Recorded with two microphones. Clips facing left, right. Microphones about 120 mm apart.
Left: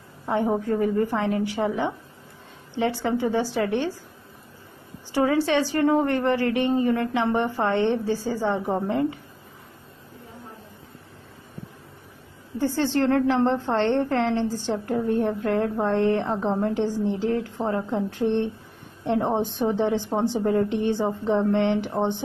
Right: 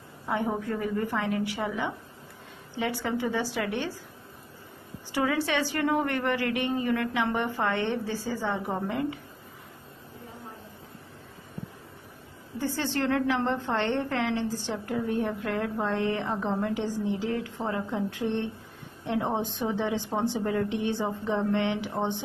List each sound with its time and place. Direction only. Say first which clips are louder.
0.3 s a woman's voice: left 6 dB; 35° left (ahead or behind)
5.1 s a woman's voice: left 6 dB; 35° left (ahead or behind)
12.5 s a woman's voice: left 6 dB; 55° left (ahead or behind)
12.9 s a woman's voice: left 5 dB; 40° left (ahead or behind)
20.6 s a woman's voice: left 5 dB; 60° left (ahead or behind)